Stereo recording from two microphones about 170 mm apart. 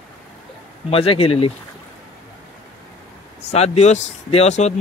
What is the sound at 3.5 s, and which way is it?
Speech, 40° left (ahead or behind).